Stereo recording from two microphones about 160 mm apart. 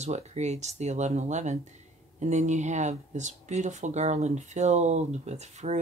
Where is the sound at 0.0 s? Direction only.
45° right (ahead or behind).